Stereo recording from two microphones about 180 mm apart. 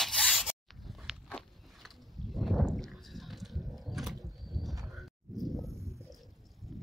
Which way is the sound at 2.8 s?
Centre (ahead or behind).